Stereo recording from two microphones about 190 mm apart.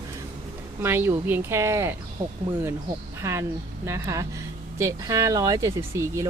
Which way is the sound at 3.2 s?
15° right (ahead or behind).